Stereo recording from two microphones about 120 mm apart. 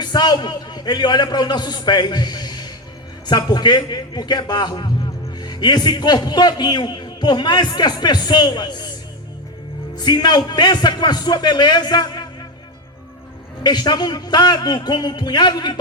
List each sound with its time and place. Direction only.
0.0 s a man's voice: 35° left (ahead or behind)
9.9 s a man's voice: 35° left (ahead or behind)
13.6 s a man's voice: 35° left (ahead or behind)